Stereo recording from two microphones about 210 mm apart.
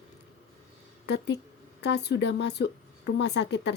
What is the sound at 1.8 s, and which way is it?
Speech, 55° left (ahead or behind).